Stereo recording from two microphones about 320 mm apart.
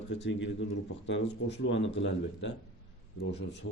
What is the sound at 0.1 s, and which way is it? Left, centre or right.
Speech, left.